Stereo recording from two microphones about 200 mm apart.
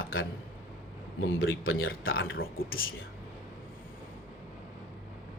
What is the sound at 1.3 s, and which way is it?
Speech, 85° left.